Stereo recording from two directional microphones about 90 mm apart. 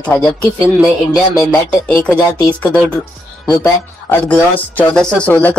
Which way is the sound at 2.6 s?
15° left (ahead or behind).